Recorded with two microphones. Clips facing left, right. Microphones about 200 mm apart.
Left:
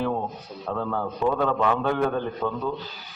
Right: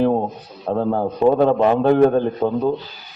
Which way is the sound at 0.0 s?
40° right (ahead or behind).